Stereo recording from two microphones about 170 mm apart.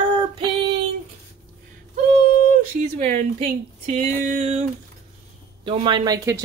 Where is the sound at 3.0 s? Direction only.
45° right (ahead or behind).